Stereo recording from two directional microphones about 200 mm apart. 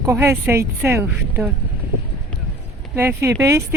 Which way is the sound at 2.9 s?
10° right (ahead or behind).